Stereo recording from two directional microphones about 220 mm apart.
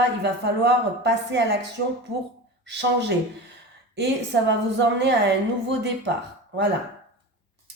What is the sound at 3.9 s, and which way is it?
Speech, 50° right (ahead or behind).